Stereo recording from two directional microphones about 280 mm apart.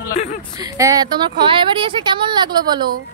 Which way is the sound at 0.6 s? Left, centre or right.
Centre.